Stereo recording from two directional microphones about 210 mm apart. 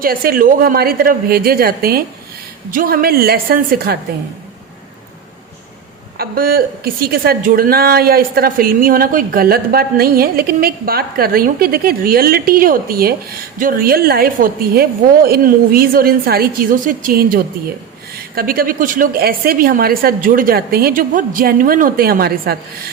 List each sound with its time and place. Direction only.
0.0 s a woman's voice: 45° right (ahead or behind)
6.1 s a woman's voice: 45° right (ahead or behind)